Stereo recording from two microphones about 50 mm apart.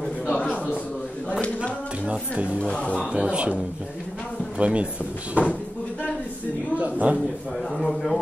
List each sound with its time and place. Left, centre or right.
2.0 s speech: right
2.6 s speech: centre
3.1 s speech: centre
4.6 s speech: right
6.7 s speech: right
7.7 s a man's voice: centre